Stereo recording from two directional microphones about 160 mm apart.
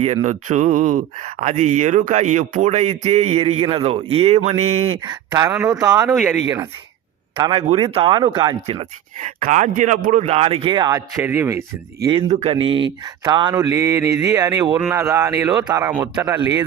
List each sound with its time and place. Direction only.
0.0 s speech: 40° right (ahead or behind)
5.0 s speech: 20° right (ahead or behind)
6.1 s speech: 5° right (ahead or behind)
7.3 s speech: 30° right (ahead or behind)
7.7 s speech: 40° right (ahead or behind)
8.6 s speech: 40° right (ahead or behind)
9.2 s speech: 50° right (ahead or behind); by 11.0 s 25° right (ahead or behind)
11.2 s a man's voice: 15° right (ahead or behind)
12.3 s a man's voice: 40° right (ahead or behind); by 16.6 s 15° right (ahead or behind)